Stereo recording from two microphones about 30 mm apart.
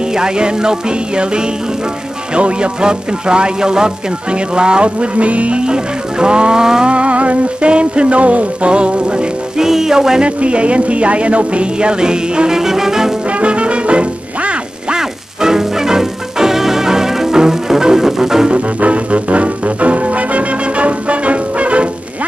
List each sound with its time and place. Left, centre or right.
0.0 s speech: right
4.3 s music: right
5.6 s music: right
6.6 s speech: right
6.9 s a sound: right
7.7 s music: right
9.6 s music: centre
10.2 s music: right
12.4 s music: centre
13.3 s music: right
15.0 s music: centre
18.5 s music: right